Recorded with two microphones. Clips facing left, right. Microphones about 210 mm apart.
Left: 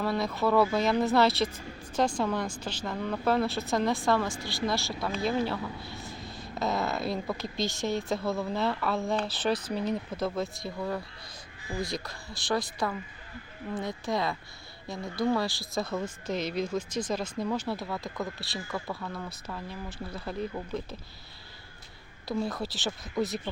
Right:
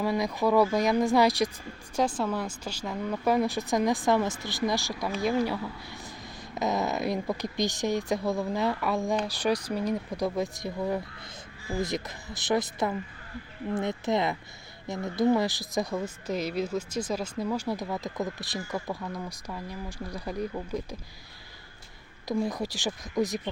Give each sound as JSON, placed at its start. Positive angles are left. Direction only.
{"t": 0.0, "sound": "a woman's voice", "side_deg": -15}
{"t": 22.3, "sound": "a woman's voice", "side_deg": -15}